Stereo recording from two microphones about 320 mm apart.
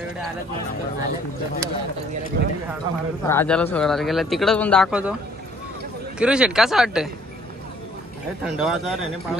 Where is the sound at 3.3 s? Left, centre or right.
Centre.